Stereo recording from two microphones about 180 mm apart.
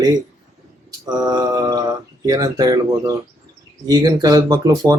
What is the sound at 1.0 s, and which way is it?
Speech, 20° right (ahead or behind).